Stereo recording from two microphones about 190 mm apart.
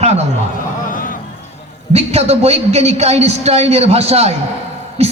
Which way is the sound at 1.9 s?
35° right (ahead or behind).